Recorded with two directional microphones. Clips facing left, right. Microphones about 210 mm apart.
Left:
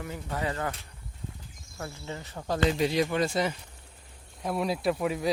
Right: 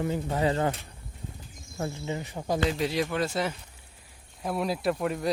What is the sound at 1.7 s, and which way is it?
Speech, 20° right (ahead or behind).